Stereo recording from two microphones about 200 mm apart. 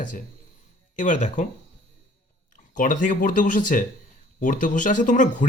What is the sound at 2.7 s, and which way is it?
Speech, 40° left (ahead or behind).